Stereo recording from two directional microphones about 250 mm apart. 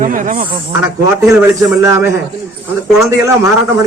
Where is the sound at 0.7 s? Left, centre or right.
Centre.